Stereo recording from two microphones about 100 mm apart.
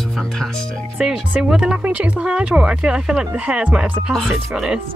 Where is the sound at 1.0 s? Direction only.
10° right (ahead or behind).